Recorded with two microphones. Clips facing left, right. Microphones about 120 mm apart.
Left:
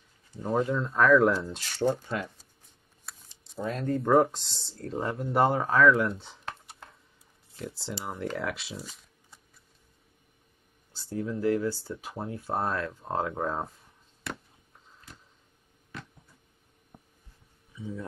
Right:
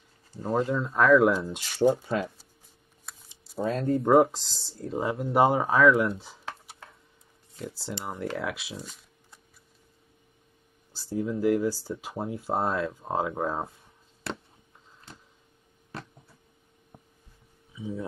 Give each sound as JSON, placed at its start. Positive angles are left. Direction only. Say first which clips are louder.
{"t": 0.4, "sound": "speech", "louder": "right 1 dB", "side_deg": 0}
{"t": 1.5, "sound": "speech", "louder": "right 4 dB", "side_deg": -15}
{"t": 3.1, "sound": "a sound", "louder": "right 1 dB", "side_deg": 0}
{"t": 3.8, "sound": "speech", "louder": "right 2 dB", "side_deg": -30}
{"t": 4.1, "sound": "speech", "louder": "right 2 dB", "side_deg": -5}
{"t": 11.1, "sound": "speech", "louder": "right 2 dB", "side_deg": -5}
{"t": 16.9, "sound": "heart sounds", "louder": "right 1 dB", "side_deg": -15}
{"t": 17.7, "sound": "a sound", "louder": "right 3 dB", "side_deg": -15}